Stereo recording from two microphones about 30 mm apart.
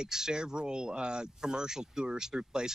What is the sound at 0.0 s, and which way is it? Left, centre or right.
Speech, right.